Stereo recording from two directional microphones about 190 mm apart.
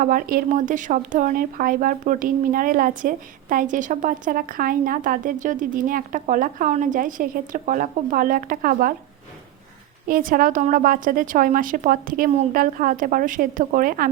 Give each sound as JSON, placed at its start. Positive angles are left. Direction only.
{"t": 0.0, "sound": "speech", "side_deg": -45}
{"t": 10.1, "sound": "speech", "side_deg": -45}